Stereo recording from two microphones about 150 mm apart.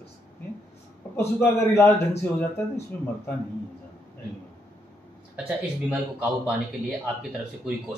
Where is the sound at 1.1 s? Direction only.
15° left (ahead or behind).